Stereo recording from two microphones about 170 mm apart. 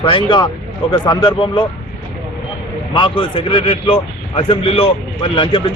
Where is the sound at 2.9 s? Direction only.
30° left (ahead or behind).